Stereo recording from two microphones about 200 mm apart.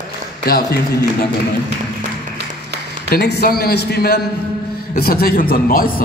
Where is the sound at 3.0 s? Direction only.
55° left (ahead or behind).